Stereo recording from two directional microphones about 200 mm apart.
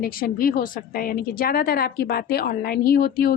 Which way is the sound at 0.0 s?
45° left (ahead or behind).